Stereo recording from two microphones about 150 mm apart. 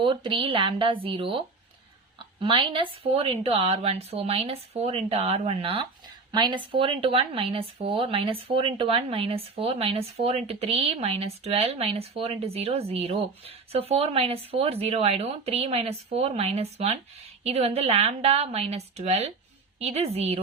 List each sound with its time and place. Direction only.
0.0 s a woman's voice: 35° right (ahead or behind)